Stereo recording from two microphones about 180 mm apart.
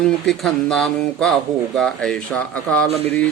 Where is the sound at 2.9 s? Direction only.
35° right (ahead or behind).